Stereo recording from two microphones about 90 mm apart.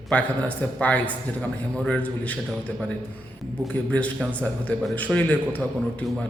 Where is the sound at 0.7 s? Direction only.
15° left (ahead or behind).